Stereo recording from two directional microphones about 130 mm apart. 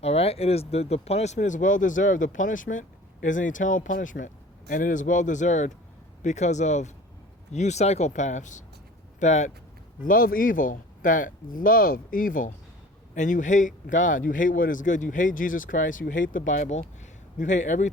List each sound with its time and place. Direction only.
0.0 s speech: 50° left (ahead or behind)
10.0 s speech: 90° left
13.1 s speech: 75° left (ahead or behind)